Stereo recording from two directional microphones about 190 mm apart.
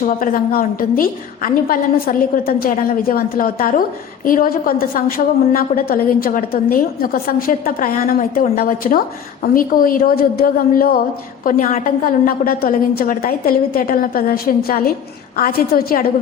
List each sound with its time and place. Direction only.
0.0 s a woman's voice: 50° left (ahead or behind)